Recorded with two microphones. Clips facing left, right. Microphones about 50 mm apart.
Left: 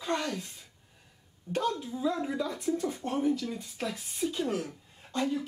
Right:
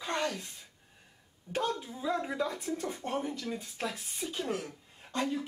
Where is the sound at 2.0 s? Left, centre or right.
Centre.